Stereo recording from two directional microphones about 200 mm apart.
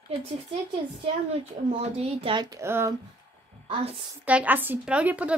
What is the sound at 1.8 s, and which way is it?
Speech, 30° right (ahead or behind).